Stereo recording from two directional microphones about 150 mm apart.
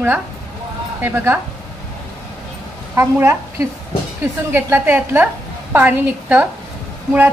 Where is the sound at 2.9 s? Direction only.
20° right (ahead or behind).